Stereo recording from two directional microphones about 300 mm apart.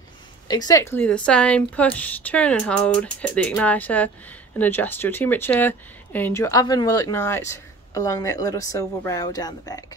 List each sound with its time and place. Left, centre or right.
0.5 s a woman's voice: centre